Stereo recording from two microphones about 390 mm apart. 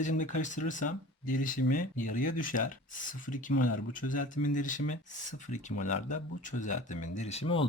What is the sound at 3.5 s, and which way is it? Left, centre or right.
Speech, left.